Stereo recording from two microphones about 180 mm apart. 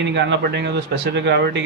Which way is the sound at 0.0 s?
80° right.